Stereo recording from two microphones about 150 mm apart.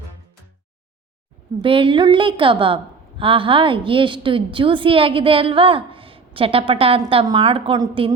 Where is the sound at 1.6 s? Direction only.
35° right (ahead or behind).